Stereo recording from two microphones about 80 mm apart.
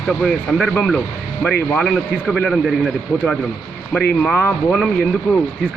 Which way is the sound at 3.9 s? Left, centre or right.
Centre.